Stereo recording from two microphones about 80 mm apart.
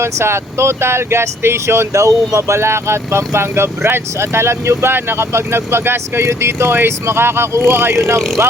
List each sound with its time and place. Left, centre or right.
0.0 s speech: right